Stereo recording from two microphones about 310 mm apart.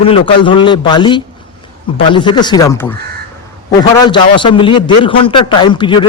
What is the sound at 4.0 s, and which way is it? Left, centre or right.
A man's voice, centre.